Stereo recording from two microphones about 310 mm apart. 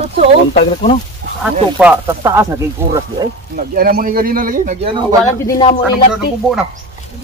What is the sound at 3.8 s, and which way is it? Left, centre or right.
A man's voice, right.